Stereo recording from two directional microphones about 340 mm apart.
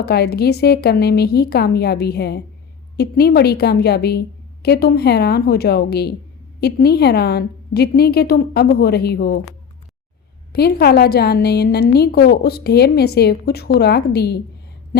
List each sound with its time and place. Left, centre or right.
0.0 s a woman's voice: left